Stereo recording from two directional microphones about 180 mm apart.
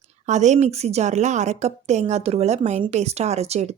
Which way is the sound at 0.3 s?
40° right (ahead or behind).